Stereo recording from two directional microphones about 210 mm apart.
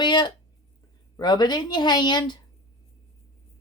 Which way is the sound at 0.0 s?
20° left (ahead or behind).